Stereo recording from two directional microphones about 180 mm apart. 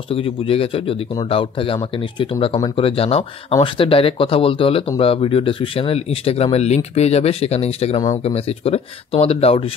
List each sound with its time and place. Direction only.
0.1 s speech: 30° left (ahead or behind)